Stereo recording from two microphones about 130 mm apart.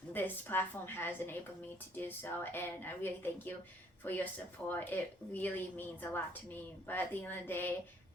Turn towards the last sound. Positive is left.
turn(degrees=15)  # may be behind; listen again after turning